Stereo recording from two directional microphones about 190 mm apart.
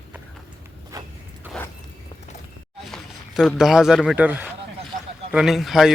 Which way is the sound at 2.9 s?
Centre (ahead or behind).